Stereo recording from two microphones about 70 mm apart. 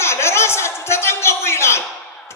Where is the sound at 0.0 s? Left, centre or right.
Left.